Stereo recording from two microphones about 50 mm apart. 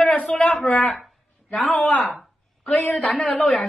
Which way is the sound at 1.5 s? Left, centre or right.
Centre.